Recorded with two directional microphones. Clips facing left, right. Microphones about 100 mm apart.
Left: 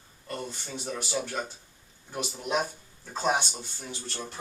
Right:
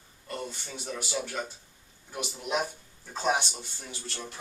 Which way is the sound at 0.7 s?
5° left (ahead or behind).